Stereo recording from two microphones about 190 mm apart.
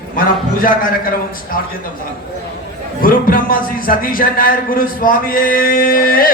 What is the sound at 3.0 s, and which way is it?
A man's voice, 50° left (ahead or behind).